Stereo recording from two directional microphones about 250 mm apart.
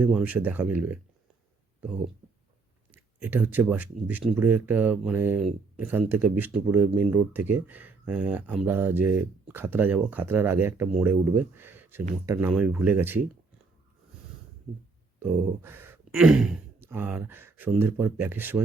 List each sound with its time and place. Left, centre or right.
0.0 s speech: centre
2.9 s speech: centre
15.2 s speech: centre